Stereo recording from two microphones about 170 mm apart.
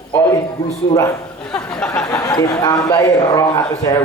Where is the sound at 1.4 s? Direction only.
5° left (ahead or behind).